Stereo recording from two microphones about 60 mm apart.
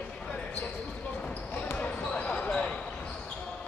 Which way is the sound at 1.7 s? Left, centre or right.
Left.